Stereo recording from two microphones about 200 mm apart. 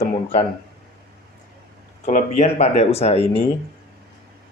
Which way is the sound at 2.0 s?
35° left (ahead or behind).